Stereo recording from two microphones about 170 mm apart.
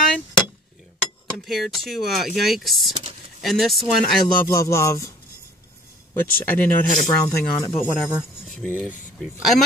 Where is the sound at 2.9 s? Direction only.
30° right (ahead or behind).